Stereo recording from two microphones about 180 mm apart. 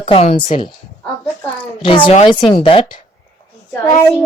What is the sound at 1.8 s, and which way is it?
A woman's voice, 30° left (ahead or behind).